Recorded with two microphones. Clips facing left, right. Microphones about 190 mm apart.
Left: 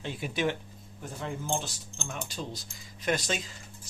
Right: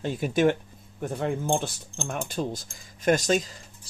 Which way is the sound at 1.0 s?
60° right (ahead or behind).